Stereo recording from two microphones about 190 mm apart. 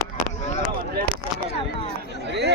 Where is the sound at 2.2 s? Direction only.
60° right (ahead or behind).